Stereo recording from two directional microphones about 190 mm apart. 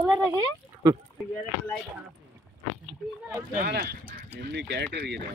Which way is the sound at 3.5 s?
55° right (ahead or behind).